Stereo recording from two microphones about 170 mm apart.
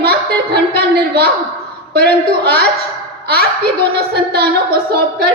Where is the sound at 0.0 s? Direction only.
70° right (ahead or behind).